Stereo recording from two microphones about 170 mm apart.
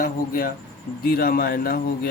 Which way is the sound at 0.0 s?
55° left (ahead or behind).